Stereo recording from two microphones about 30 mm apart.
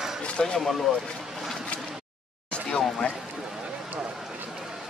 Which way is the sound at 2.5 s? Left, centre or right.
Left.